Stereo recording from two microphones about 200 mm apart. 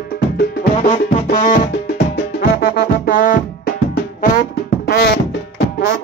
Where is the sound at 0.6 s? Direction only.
45° left (ahead or behind).